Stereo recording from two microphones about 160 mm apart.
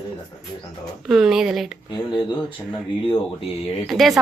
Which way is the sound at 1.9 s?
30° left (ahead or behind).